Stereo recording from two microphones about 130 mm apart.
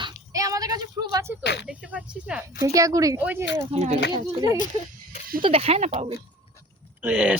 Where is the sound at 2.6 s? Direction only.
25° right (ahead or behind).